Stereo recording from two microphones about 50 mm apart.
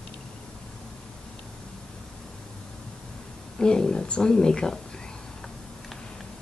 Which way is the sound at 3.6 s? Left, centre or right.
Centre.